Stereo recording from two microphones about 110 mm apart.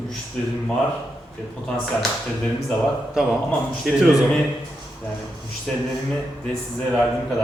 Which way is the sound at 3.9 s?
5° right (ahead or behind).